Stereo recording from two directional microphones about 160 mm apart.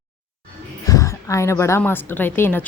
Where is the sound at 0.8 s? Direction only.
20° left (ahead or behind).